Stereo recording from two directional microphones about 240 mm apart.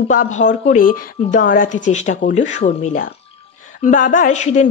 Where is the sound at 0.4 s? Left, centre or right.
Left.